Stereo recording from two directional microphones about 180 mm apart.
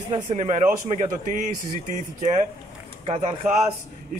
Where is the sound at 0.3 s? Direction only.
40° right (ahead or behind).